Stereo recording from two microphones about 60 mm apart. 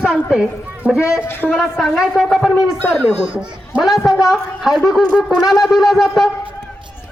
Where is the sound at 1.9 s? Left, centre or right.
Centre.